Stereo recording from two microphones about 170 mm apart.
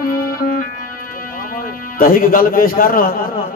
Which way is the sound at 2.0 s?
55° left (ahead or behind).